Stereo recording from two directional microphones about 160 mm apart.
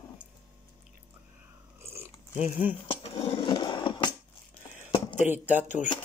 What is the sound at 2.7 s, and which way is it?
Cutlery, 35° left (ahead or behind).